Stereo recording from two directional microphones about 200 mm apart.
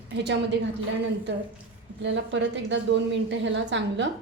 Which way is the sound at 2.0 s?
65° right (ahead or behind).